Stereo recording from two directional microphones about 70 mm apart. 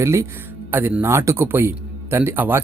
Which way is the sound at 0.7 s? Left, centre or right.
Right.